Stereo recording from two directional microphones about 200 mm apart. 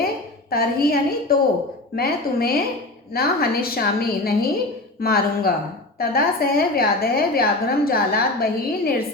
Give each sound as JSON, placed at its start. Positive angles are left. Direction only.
{"t": 0.5, "sound": "a woman's voice", "side_deg": 50}